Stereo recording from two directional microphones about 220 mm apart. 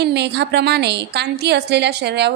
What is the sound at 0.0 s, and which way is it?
A woman's voice, 50° right (ahead or behind).